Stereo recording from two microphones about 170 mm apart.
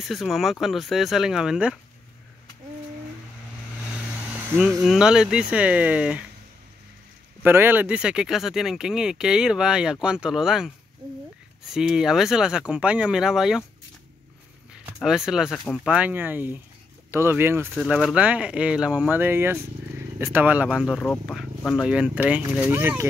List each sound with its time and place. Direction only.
0.0 s speech: centre (ahead or behind)
4.4 s a sound: 10° right (ahead or behind)
4.6 s speech: centre (ahead or behind)
7.4 s speech: 10° right (ahead or behind)
15.0 s speech: 5° right (ahead or behind)
17.7 s speech: 5° right (ahead or behind)